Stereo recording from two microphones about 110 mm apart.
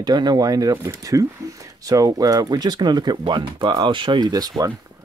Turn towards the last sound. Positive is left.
turn(degrees=-35)  # may be behind; listen again after turning